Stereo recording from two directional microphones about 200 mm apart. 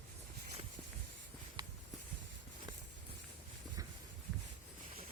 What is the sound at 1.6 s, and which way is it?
Walk, 20° right (ahead or behind).